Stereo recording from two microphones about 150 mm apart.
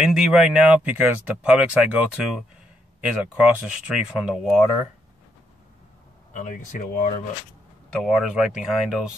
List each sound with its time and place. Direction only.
0.0 s speech: 5° right (ahead or behind)
6.3 s speech: 55° left (ahead or behind)
7.9 s speech: centre (ahead or behind)